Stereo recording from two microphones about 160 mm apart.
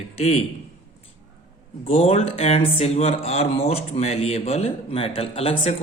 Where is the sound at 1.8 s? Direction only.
35° left (ahead or behind).